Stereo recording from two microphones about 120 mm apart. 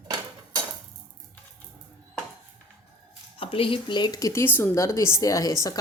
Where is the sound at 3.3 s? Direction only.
50° left (ahead or behind).